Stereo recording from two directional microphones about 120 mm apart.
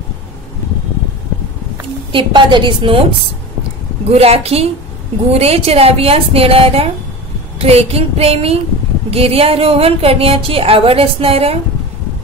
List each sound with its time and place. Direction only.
2.1 s speech: 40° right (ahead or behind)
4.1 s a woman's voice: 60° right (ahead or behind)